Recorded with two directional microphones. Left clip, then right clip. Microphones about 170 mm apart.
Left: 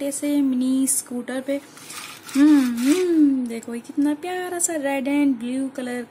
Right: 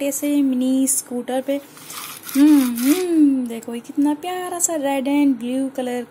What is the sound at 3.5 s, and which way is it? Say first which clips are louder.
Speech: right 2 dB; 5° right (ahead or behind).